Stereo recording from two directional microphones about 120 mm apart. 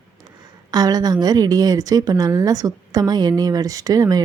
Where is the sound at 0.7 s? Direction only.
35° right (ahead or behind).